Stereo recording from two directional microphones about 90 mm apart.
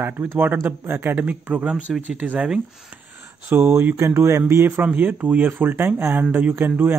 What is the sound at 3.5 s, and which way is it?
Speech, 25° right (ahead or behind).